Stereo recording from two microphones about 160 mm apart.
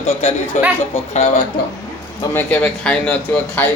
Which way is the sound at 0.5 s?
50° left (ahead or behind).